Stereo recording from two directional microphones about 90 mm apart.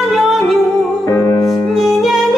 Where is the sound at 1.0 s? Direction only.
35° left (ahead or behind).